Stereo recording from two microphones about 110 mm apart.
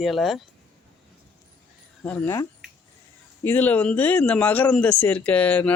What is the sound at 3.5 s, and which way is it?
Speech, 15° left (ahead or behind).